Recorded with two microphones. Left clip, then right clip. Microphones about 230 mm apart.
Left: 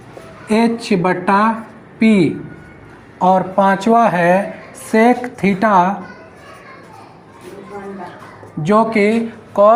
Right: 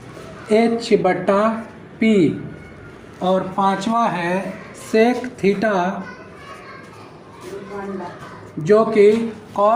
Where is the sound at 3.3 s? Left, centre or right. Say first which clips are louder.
Left 5 dB; left.